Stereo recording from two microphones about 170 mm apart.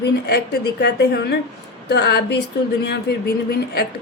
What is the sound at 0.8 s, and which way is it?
A woman's voice, 80° left.